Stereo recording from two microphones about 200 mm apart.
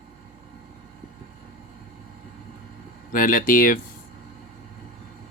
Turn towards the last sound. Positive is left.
turn(degrees=45)  # may be behind; listen again after turning